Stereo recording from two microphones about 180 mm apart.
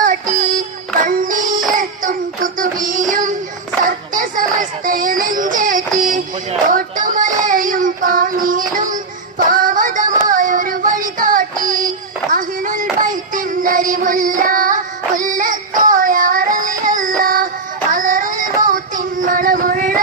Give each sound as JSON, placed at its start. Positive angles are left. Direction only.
{"t": 0.0, "sound": "synthetic singing", "side_deg": -45}
{"t": 1.0, "sound": "child singing", "side_deg": -50}
{"t": 3.8, "sound": "a sound", "side_deg": -50}
{"t": 6.7, "sound": "child singing", "side_deg": -45}
{"t": 17.9, "sound": "music", "side_deg": -50}
{"t": 18.7, "sound": "child singing", "side_deg": -45}